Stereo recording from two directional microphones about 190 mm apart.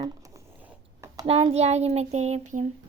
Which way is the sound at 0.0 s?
15° right (ahead or behind).